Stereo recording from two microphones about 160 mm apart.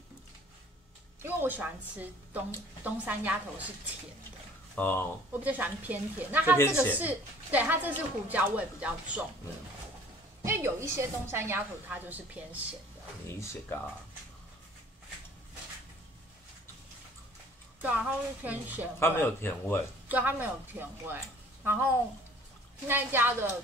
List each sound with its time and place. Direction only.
1.2 s a woman's voice: 10° right (ahead or behind)
4.7 s a man's voice: 10° left (ahead or behind)
5.3 s a woman's voice: 10° right (ahead or behind)
6.6 s a man's voice: 15° left (ahead or behind)
7.0 s a woman's voice: 10° right (ahead or behind)
10.4 s a woman's voice: 15° right (ahead or behind)
13.3 s a man's voice: 15° left (ahead or behind)
17.8 s a woman's voice: 10° right (ahead or behind)
18.9 s a man's voice: 15° left (ahead or behind)
20.1 s a woman's voice: 10° right (ahead or behind)
22.8 s a woman's voice: 15° right (ahead or behind)